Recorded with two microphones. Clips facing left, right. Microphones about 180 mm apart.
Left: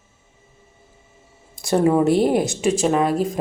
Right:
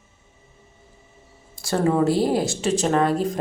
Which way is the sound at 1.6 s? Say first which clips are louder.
Left 3 dB; 15° left (ahead or behind).